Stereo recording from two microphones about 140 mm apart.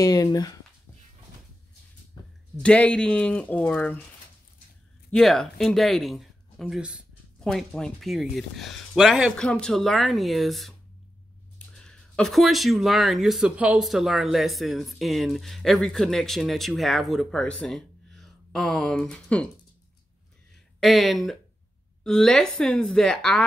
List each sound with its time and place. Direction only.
0.0 s speech: 25° left (ahead or behind)
2.2 s a sound: 30° left (ahead or behind)
2.5 s speech: 10° left (ahead or behind)
5.1 s speech: centre (ahead or behind)
7.3 s speech: 5° left (ahead or behind)
20.8 s speech: centre (ahead or behind)